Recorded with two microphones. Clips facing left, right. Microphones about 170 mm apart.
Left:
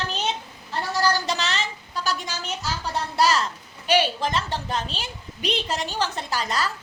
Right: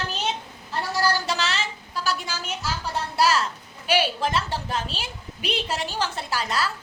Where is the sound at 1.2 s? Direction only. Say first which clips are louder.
Even; 5° right (ahead or behind).